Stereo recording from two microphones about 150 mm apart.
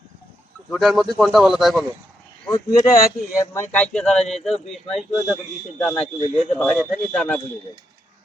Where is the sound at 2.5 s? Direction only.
25° left (ahead or behind); by 5.0 s centre (ahead or behind).